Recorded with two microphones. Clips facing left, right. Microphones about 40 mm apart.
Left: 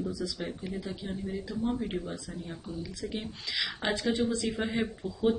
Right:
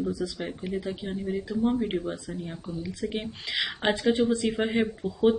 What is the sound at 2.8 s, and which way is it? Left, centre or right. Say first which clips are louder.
Speech: right 6 dB; right.